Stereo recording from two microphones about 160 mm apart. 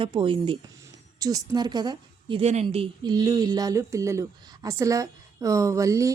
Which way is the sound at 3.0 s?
25° right (ahead or behind).